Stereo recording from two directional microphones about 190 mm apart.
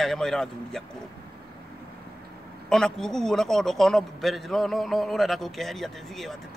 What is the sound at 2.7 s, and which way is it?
Speech, 5° left (ahead or behind).